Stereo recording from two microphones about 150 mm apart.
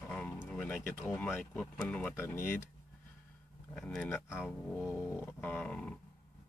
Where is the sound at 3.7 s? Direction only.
5° left (ahead or behind).